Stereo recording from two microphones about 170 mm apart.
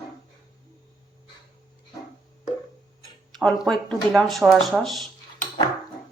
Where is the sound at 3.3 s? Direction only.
Centre (ahead or behind).